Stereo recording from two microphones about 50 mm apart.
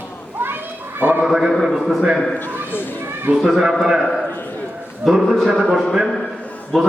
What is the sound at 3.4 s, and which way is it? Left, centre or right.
Speech, centre.